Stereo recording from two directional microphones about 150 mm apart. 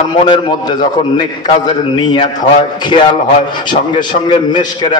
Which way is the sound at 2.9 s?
30° left (ahead or behind).